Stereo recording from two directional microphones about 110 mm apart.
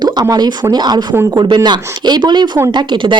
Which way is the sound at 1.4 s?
40° right (ahead or behind).